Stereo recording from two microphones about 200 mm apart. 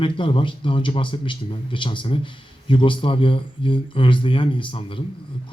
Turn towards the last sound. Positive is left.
turn(degrees=25)  # may be behind; listen again after turning